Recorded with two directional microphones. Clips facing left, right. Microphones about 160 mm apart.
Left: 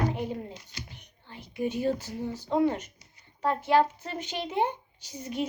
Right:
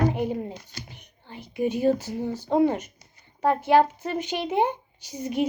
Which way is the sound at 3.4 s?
60° right (ahead or behind).